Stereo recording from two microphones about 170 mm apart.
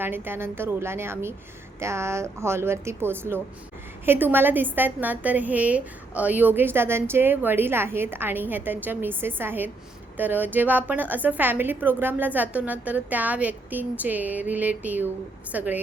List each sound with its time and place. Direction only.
0.0 s a woman's voice: 15° right (ahead or behind)